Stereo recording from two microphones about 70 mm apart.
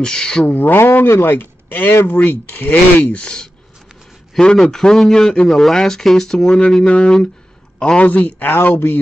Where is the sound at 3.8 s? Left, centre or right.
Centre.